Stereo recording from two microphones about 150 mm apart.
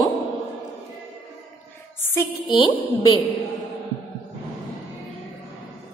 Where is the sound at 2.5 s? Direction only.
35° left (ahead or behind).